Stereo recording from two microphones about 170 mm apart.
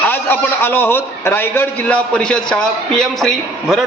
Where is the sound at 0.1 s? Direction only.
10° left (ahead or behind).